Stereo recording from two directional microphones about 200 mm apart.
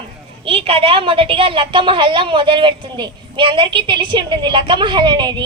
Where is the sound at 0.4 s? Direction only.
30° right (ahead or behind).